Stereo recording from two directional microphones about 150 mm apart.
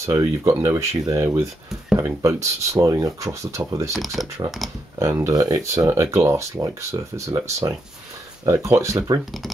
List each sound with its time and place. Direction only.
0.0 s speech: 20° right (ahead or behind)
3.9 s speech: centre (ahead or behind)
4.9 s speech: 20° right (ahead or behind)